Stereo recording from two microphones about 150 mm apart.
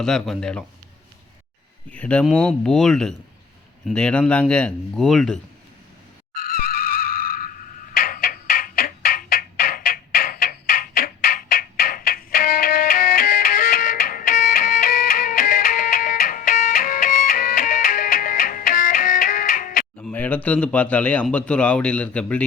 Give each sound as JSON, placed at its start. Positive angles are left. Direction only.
{"t": 0.0, "sound": "speech", "side_deg": 5}
{"t": 1.9, "sound": "speech", "side_deg": 10}
{"t": 6.3, "sound": "a sound", "side_deg": 75}
{"t": 20.0, "sound": "speech", "side_deg": 10}